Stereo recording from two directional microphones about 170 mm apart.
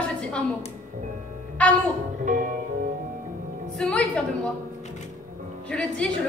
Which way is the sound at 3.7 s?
5° left (ahead or behind).